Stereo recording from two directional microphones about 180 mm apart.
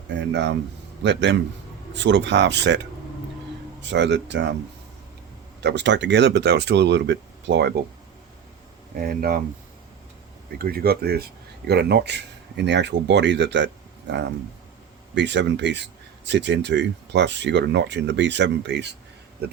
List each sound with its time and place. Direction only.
0.2 s speech: 75° right (ahead or behind)
5.5 s speech: 75° right (ahead or behind)
9.0 s speech: 55° right (ahead or behind)
10.6 s speech: 55° right (ahead or behind); by 18.9 s 75° right (ahead or behind)